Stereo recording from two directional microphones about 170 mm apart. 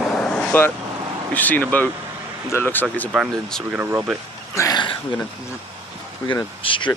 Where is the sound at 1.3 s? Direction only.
10° left (ahead or behind).